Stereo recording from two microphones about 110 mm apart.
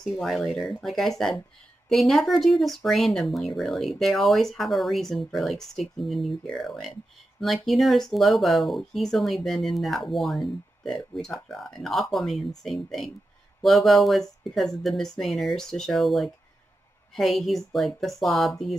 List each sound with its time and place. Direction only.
0.0 s speech: centre (ahead or behind)